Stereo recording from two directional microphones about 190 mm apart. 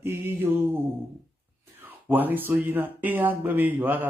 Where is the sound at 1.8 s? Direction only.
10° right (ahead or behind).